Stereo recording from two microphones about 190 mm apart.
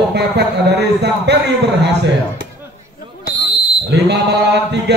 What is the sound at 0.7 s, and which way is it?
A man's voice, 60° right (ahead or behind).